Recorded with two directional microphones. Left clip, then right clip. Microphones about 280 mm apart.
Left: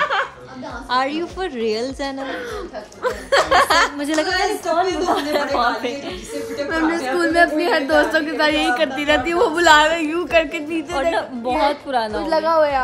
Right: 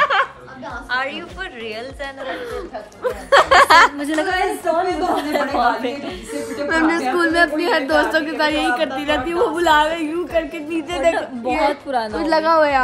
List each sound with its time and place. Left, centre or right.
0.0 s a sound: right
0.8 s a woman's voice: centre
3.4 s chuckle: right
4.0 s a woman's voice: centre
6.7 s a woman's voice: right
7.2 s a woman's voice: centre
12.3 s a woman's voice: right